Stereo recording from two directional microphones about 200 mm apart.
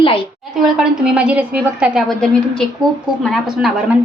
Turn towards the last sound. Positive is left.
turn(degrees=0)  # may be behind; listen again after turning